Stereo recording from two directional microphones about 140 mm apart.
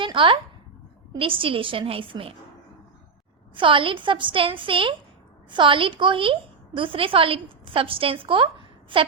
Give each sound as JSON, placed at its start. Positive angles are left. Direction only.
{"t": 0.0, "sound": "a sound", "side_deg": -35}
{"t": 1.2, "sound": "a woman's voice", "side_deg": -40}
{"t": 3.5, "sound": "a woman's voice", "side_deg": -35}